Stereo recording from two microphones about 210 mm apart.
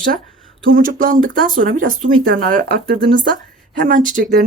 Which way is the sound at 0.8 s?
40° right (ahead or behind).